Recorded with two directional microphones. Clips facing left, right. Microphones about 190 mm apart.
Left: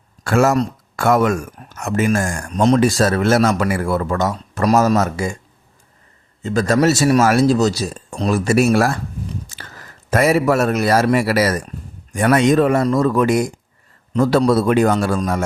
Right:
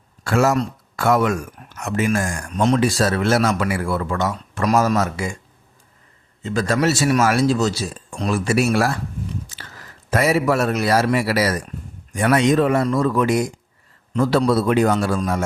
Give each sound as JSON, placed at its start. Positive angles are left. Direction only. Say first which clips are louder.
{"t": 0.3, "sound": "speech", "louder": "left 3 dB", "side_deg": 50}
{"t": 6.4, "sound": "a man's voice", "louder": "left 4 dB", "side_deg": 40}
{"t": 10.1, "sound": "speech", "louder": "left 3 dB", "side_deg": 50}